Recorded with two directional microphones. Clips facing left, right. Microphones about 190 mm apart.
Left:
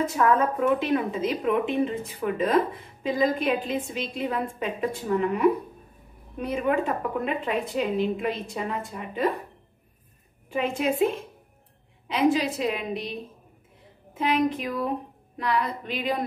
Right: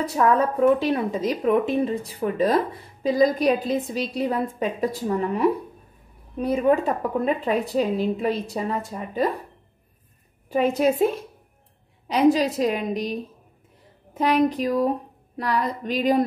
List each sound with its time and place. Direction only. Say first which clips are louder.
0.0 s a woman's voice: right 2 dB; 35° right (ahead or behind)
10.5 s a woman's voice: right 6 dB; 40° right (ahead or behind)